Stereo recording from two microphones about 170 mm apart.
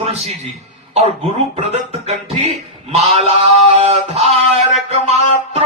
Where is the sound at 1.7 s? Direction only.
40° right (ahead or behind).